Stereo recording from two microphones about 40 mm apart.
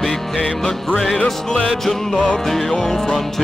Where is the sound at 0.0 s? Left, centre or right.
Centre.